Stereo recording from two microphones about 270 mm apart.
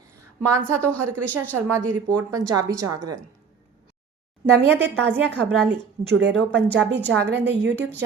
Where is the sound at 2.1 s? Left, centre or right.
Centre.